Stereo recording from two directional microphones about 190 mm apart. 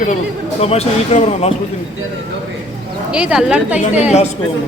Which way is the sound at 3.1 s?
5° right (ahead or behind).